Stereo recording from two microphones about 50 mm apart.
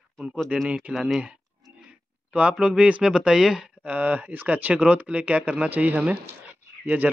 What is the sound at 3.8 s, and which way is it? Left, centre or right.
Speech, right.